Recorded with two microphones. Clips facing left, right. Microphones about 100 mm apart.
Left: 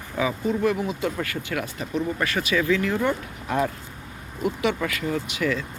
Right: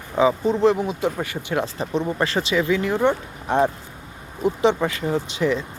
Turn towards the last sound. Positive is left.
turn(degrees=-30)  # may be behind; listen again after turning